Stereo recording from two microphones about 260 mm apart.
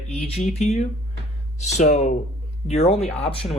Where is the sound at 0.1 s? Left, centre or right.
Left.